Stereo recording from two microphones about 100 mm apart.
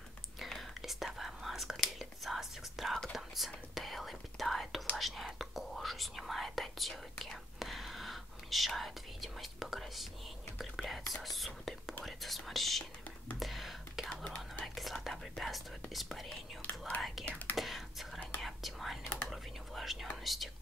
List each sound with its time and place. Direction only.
0.4 s whispering: centre (ahead or behind)
14.2 s whispering: 10° left (ahead or behind)
16.6 s whispering: 15° left (ahead or behind)
17.6 s whispering: centre (ahead or behind)